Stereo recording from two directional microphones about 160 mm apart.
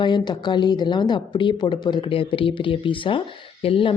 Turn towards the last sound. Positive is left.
turn(degrees=35)  # may be behind; listen again after turning